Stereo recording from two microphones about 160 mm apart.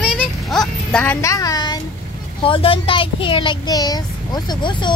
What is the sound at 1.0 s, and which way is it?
Speech, 15° left (ahead or behind).